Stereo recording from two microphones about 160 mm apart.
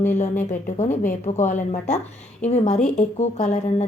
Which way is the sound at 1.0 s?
50° left (ahead or behind).